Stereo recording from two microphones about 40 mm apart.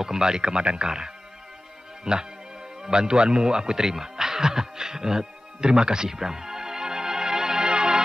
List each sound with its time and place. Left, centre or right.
0.0 s speech: centre
2.8 s music: centre